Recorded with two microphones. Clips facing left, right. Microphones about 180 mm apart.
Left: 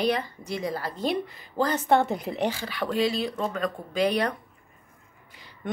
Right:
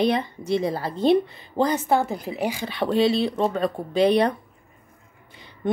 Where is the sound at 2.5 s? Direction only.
20° right (ahead or behind).